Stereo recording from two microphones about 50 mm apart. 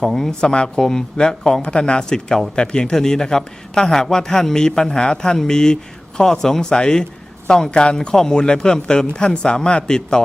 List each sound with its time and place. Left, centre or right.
0.0 s speech: centre
0.4 s speech: centre